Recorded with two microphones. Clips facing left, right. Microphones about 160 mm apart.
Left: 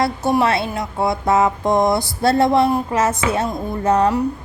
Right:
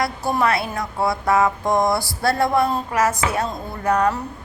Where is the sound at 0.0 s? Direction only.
20° left (ahead or behind).